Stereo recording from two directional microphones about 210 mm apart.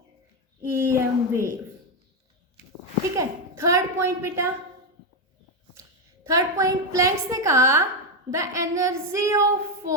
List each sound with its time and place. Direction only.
0.6 s a woman's voice: 10° right (ahead or behind)
3.2 s a child's voice: 15° right (ahead or behind)
6.2 s a woman's voice: 15° right (ahead or behind)